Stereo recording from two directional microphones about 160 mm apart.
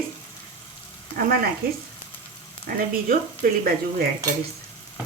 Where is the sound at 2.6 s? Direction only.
60° right (ahead or behind).